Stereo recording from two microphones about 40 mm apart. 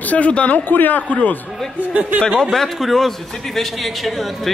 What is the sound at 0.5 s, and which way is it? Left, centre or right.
Speech, left.